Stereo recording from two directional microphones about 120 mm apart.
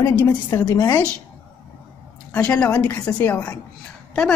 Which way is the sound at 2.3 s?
10° left (ahead or behind).